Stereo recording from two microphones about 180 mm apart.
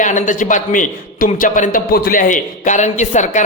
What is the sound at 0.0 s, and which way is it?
A man's voice, 45° left (ahead or behind).